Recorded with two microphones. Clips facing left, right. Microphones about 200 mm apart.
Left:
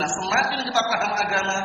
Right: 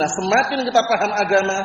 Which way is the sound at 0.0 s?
50° right (ahead or behind).